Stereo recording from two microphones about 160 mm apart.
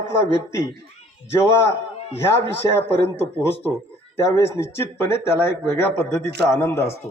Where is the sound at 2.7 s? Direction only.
15° left (ahead or behind).